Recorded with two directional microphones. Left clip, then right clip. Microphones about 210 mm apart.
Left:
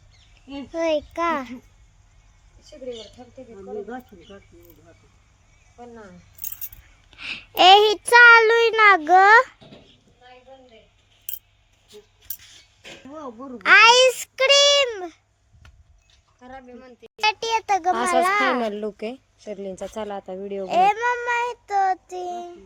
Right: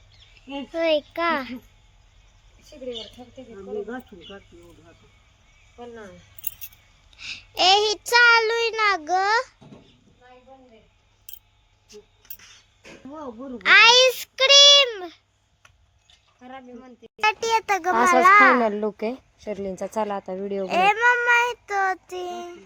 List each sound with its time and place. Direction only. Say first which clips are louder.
0.8 s child singing: even; 5° left (ahead or behind)
3.2 s speech: even; 50° right (ahead or behind)
5.7 s speech: right 2 dB; 45° right (ahead or behind)
7.2 s a child's voice: left 5 dB; 35° left (ahead or behind)
9.6 s a sound: left 2 dB; 45° right (ahead or behind)
12.8 s speech: left 1 dB; 40° right (ahead or behind)
13.6 s a child's voice: left 1 dB; 20° left (ahead or behind)
16.4 s speech: even; 50° right (ahead or behind)
17.2 s child singing: right 1 dB; 10° left (ahead or behind)
18.6 s speech: right 3 dB; 30° right (ahead or behind)
20.7 s child singing: even; 10° left (ahead or behind)